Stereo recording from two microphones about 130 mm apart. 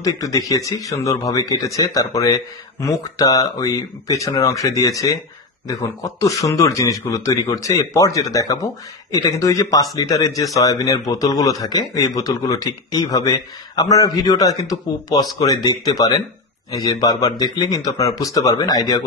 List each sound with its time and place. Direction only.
0.0 s a man's voice: 25° left (ahead or behind)